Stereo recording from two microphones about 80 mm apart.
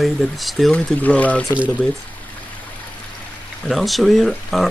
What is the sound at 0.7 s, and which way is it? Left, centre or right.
Speech, centre.